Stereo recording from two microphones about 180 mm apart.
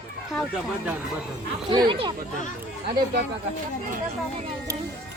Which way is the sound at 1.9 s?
30° right (ahead or behind).